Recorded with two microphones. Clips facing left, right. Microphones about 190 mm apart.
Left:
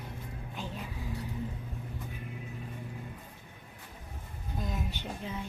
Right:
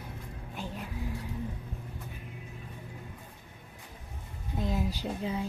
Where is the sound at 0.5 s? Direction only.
10° right (ahead or behind).